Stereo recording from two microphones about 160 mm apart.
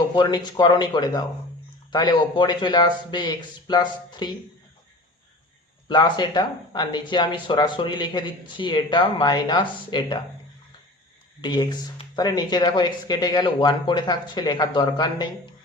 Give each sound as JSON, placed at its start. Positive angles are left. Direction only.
{"t": 0.2, "sound": "speech", "side_deg": 25}
{"t": 5.9, "sound": "speech", "side_deg": 30}
{"t": 11.3, "sound": "speech", "side_deg": 25}